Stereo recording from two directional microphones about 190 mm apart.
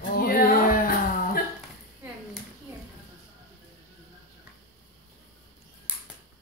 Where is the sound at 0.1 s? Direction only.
50° left (ahead or behind).